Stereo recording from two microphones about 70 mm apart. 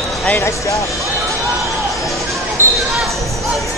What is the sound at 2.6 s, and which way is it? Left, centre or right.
Basketball bounce, left.